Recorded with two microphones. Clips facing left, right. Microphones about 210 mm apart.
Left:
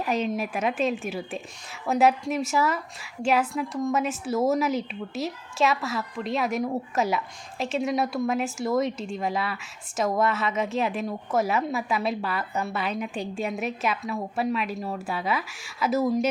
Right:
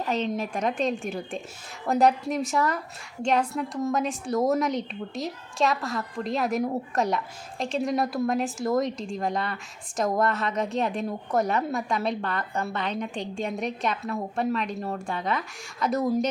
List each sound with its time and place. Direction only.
0.0 s a woman's voice: 10° left (ahead or behind)